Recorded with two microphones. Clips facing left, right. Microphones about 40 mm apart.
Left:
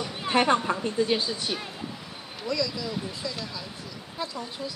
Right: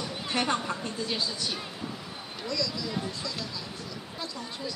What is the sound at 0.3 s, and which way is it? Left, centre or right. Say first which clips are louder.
A woman's voice: left 7 dB; left.